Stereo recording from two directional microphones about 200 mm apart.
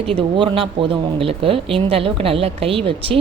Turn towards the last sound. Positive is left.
turn(degrees=-25)  # may be behind; listen again after turning